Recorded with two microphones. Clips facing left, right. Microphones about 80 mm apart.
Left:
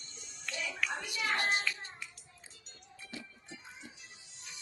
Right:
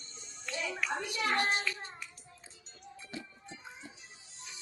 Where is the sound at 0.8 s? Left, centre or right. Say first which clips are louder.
Right 4 dB; right.